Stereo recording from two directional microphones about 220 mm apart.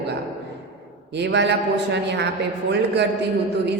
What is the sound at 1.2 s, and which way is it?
A woman's voice, 50° right (ahead or behind).